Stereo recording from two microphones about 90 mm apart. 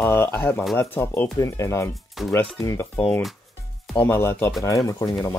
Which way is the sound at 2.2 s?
5° right (ahead or behind).